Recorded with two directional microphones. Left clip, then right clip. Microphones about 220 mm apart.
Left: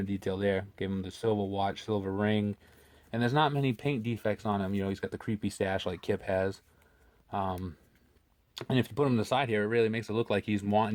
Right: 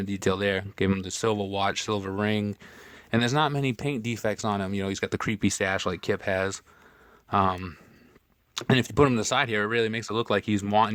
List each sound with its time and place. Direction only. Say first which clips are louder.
0.0 s speech: right 5 dB; 30° right (ahead or behind)